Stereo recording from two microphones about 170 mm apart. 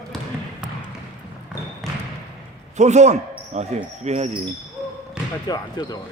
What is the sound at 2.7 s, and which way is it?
Speech, 45° right (ahead or behind).